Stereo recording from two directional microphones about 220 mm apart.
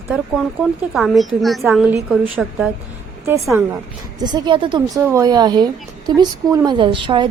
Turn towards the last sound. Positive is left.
turn(degrees=-20)  # may be behind; listen again after turning